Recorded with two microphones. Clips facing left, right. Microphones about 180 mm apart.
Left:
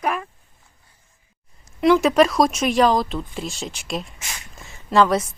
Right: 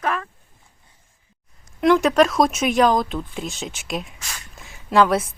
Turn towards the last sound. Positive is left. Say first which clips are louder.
# even
turn(degrees=0)  # may be behind; listen again after turning